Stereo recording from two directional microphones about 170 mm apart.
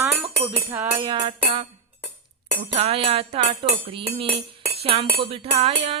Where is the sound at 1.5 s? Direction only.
40° right (ahead or behind).